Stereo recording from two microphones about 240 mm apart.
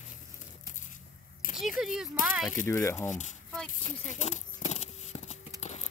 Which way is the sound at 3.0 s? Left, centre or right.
Left.